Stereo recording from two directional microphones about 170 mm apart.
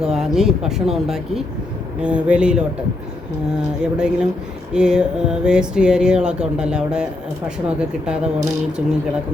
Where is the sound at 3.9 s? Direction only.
5° right (ahead or behind).